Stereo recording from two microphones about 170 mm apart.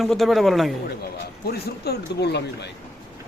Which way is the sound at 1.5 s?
70° left (ahead or behind).